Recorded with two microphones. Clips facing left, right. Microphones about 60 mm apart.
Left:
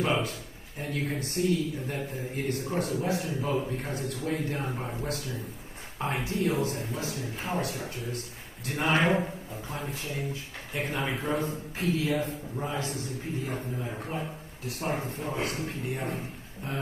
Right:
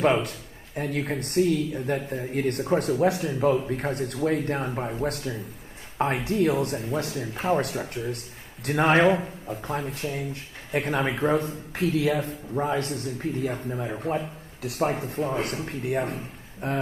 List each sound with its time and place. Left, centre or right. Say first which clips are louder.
0.0 s speech: right 6 dB; right
13.8 s a man's voice: right 7 dB; right
14.6 s speech: right 6 dB; right